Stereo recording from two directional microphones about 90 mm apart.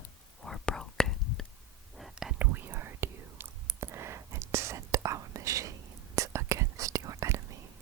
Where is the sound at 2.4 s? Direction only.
20° right (ahead or behind).